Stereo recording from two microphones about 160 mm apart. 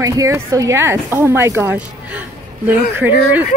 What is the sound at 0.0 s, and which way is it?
Speech, 20° right (ahead or behind).